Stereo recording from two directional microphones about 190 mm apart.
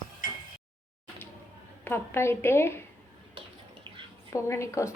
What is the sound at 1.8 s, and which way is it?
A woman's voice, 10° left (ahead or behind).